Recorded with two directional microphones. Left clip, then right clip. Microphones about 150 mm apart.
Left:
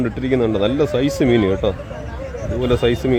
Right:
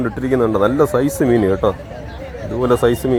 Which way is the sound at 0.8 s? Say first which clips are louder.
Right 3 dB; centre (ahead or behind).